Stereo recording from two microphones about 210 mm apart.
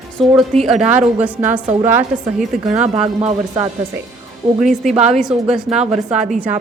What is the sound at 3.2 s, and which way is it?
Speech, 20° right (ahead or behind).